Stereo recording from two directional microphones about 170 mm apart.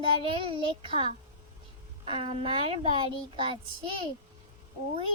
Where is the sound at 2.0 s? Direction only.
35° right (ahead or behind).